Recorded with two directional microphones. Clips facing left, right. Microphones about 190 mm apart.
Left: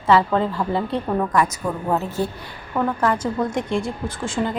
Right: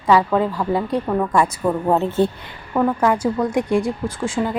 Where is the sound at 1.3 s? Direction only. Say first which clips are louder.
Right 3 dB; 30° right (ahead or behind).